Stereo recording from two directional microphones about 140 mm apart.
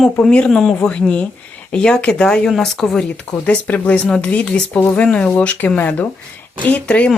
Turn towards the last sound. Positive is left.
turn(degrees=10)  # may be behind; listen again after turning